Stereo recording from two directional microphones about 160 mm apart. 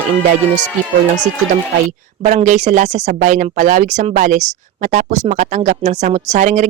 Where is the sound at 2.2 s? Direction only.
50° right (ahead or behind).